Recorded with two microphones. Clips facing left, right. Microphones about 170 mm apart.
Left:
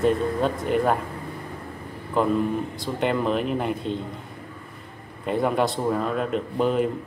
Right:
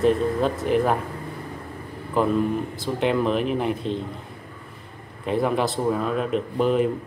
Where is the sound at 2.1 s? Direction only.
5° right (ahead or behind).